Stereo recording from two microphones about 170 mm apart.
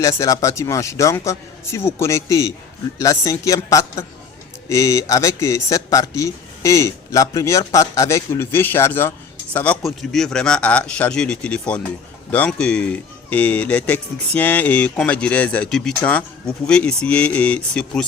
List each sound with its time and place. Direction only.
0.0 s a man's voice: 20° left (ahead or behind)